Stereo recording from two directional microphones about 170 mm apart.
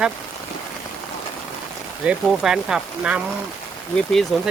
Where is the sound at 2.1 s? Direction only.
5° right (ahead or behind).